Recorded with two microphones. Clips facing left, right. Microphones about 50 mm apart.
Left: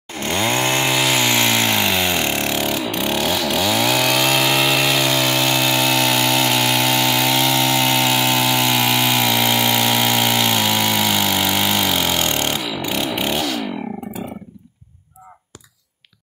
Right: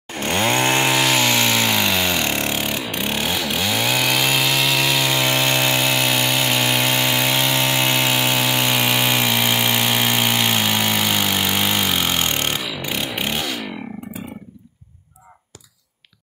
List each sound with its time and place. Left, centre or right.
0.2 s chainsaw: right
0.8 s a sound: centre
1.7 s vehicle: centre
2.4 s vehicle: right
2.9 s chainsaw: right; by 4.5 s centre
4.5 s power tool: centre
5.2 s engine: right
11.3 s vehicle: centre
12.6 s a sound: centre